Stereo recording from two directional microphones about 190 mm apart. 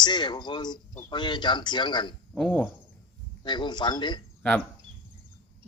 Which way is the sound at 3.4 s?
25° left (ahead or behind).